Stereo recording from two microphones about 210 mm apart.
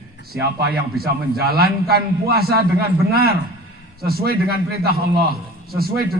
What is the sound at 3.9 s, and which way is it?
A man's voice, 45° right (ahead or behind).